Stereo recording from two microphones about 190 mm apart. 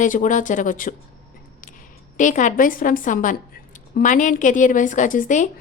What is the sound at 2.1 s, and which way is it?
A woman's voice, 40° left (ahead or behind).